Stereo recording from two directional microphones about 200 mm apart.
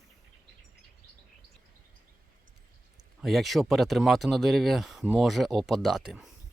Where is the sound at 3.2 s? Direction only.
Centre (ahead or behind).